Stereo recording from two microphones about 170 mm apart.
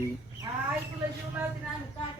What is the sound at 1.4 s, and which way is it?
Speech, 10° right (ahead or behind).